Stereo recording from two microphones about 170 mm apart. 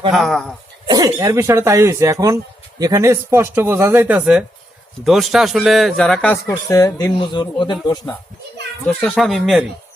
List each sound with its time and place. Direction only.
0.1 s a man's voice: centre (ahead or behind)
0.9 s a man's voice: 25° right (ahead or behind); by 6.3 s 5° left (ahead or behind)
6.3 s speech: 20° left (ahead or behind)
8.9 s a man's voice: 5° left (ahead or behind)